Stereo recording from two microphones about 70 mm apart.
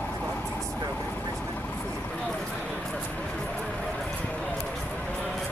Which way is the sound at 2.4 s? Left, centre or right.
Centre.